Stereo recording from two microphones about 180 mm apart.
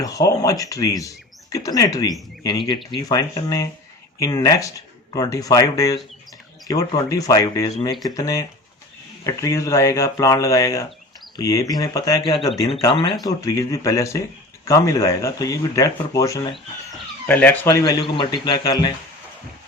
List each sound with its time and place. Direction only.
0.0 s speech: 20° left (ahead or behind)